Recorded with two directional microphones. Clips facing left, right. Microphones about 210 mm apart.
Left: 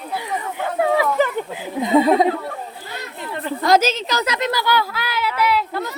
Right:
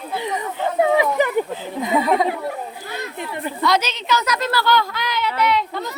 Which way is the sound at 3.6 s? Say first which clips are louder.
Left 4 dB; 45° left (ahead or behind).